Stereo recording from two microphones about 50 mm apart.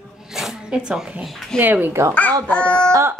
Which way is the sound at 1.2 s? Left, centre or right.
Centre.